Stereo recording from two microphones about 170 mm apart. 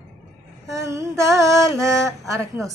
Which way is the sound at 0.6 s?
15° right (ahead or behind).